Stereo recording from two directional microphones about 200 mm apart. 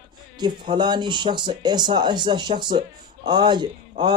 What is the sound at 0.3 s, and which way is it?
Speech, 25° right (ahead or behind).